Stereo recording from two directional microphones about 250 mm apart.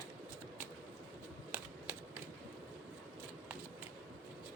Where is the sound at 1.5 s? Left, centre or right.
Centre.